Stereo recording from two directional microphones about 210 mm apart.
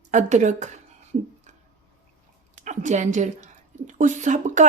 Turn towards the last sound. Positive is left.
turn(degrees=-35)  # may be behind; listen again after turning